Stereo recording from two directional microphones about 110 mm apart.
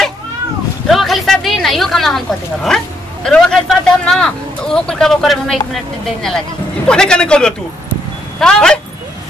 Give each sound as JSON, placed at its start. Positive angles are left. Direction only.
{"t": 0.8, "sound": "speech", "side_deg": 0}
{"t": 6.9, "sound": "a man's voice", "side_deg": 10}